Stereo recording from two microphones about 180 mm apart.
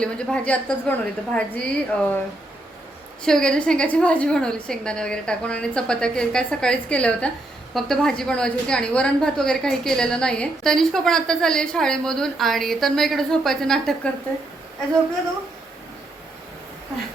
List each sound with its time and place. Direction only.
0.0 s a woman's voice: 5° left (ahead or behind)
3.2 s a woman's voice: 5° left (ahead or behind)